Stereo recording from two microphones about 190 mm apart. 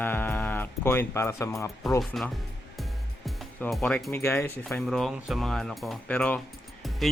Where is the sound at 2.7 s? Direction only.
Centre (ahead or behind).